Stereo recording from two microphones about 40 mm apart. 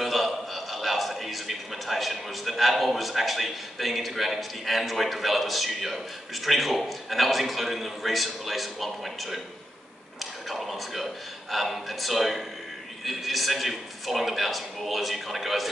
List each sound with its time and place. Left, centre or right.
0.0 s a man's voice: centre
10.5 s a man's voice: centre